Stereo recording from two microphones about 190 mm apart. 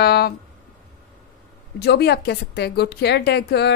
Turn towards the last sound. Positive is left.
turn(degrees=60)  # may be behind; listen again after turning